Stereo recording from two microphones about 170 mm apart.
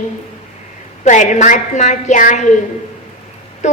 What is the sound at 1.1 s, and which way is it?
A woman's voice, 45° left (ahead or behind).